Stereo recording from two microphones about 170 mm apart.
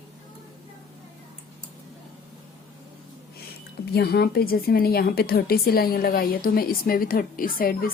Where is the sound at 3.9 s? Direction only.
70° left (ahead or behind).